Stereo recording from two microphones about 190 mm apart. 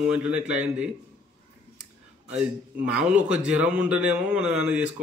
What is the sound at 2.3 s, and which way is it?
Speech, 5° right (ahead or behind).